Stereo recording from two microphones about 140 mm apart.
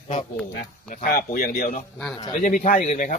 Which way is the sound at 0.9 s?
85° left.